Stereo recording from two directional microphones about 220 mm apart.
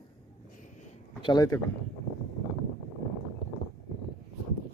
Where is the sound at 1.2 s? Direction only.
20° left (ahead or behind).